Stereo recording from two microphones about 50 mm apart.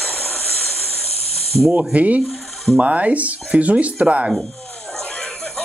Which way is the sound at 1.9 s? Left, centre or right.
Right.